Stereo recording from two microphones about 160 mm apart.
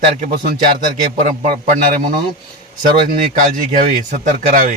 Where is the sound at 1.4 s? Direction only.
55° right (ahead or behind).